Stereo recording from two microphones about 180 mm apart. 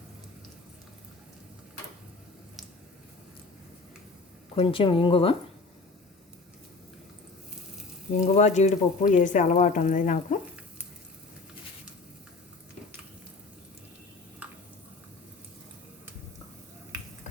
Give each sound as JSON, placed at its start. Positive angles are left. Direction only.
{"t": 4.5, "sound": "a woman's voice", "side_deg": 30}
{"t": 8.3, "sound": "speech", "side_deg": 40}